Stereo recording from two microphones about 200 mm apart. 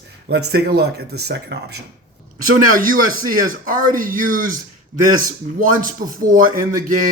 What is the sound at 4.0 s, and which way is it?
Speech, 45° right (ahead or behind).